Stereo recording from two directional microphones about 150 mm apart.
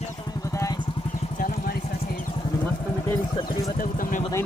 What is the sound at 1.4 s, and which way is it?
Vehicle, 65° left (ahead or behind).